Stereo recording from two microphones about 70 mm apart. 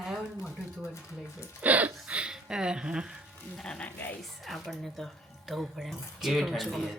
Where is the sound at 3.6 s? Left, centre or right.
Centre.